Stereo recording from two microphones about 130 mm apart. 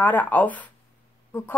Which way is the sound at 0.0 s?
15° left (ahead or behind).